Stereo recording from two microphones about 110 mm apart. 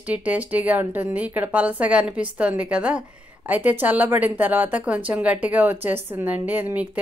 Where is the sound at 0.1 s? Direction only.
15° right (ahead or behind).